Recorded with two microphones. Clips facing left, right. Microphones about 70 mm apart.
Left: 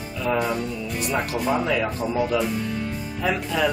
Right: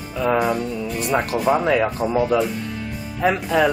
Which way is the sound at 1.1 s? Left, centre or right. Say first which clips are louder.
Right 5 dB; right.